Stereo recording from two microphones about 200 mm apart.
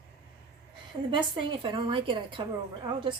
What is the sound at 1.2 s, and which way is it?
Speech, 25° right (ahead or behind).